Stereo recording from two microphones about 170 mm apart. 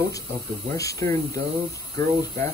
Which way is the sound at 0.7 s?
20° left (ahead or behind).